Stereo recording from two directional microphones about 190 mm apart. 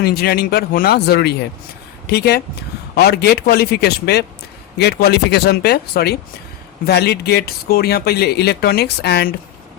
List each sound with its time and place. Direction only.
0.0 s speech: 55° left (ahead or behind)